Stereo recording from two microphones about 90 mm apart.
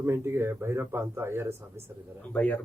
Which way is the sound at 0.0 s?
25° right (ahead or behind).